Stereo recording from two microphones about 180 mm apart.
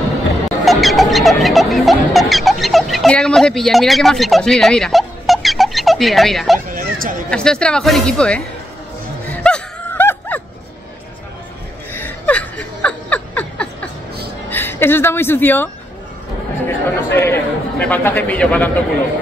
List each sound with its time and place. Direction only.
0.7 s music: centre (ahead or behind)
6.7 s a sound: 50° right (ahead or behind)
7.2 s speech: 5° left (ahead or behind)
9.3 s gasp: 5° left (ahead or behind)
11.9 s laughter: 10° left (ahead or behind)
14.5 s a woman's voice: 10° left (ahead or behind)